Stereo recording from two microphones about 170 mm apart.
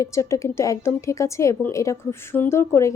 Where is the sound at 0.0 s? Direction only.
15° left (ahead or behind).